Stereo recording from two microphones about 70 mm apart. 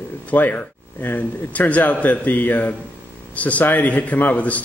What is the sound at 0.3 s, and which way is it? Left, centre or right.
A man's voice, left.